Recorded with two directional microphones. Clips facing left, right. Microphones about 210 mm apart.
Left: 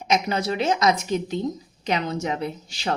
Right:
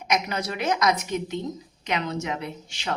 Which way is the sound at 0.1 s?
25° left (ahead or behind).